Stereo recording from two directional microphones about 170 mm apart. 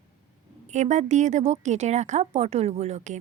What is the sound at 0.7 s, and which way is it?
Speech, 45° right (ahead or behind).